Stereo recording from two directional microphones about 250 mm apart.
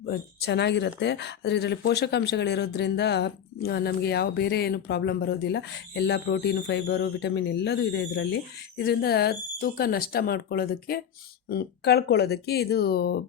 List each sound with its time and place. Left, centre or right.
0.0 s speech: left